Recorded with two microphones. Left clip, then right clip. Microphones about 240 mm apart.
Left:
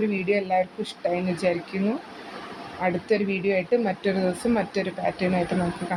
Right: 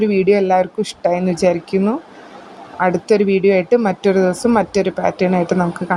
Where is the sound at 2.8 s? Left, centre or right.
Right.